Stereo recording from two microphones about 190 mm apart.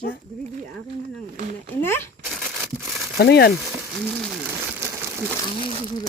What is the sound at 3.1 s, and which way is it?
Speech, 60° left (ahead or behind).